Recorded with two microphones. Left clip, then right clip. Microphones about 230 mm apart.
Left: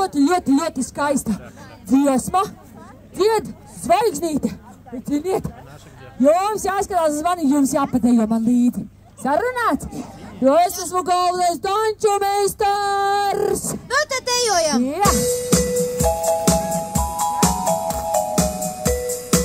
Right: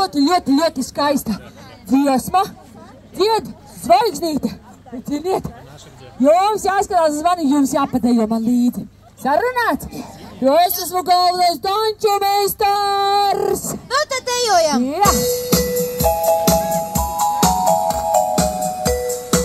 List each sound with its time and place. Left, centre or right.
0.0 s a woman's voice: left
11.9 s female singing: centre
16.8 s music: left